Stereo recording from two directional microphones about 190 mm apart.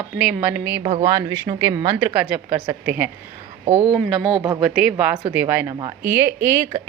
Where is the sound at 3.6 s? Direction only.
35° right (ahead or behind).